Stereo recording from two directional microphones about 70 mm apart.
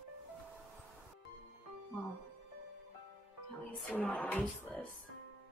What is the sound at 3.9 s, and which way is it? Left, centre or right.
Speech, left.